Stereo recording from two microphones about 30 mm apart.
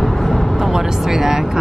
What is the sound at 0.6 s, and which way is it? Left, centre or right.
Speech, centre.